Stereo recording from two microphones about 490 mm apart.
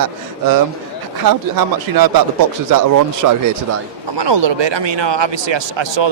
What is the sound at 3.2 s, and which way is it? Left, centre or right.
Speech, right.